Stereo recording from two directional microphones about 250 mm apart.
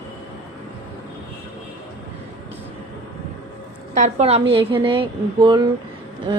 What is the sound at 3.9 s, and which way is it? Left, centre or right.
A woman's voice, right.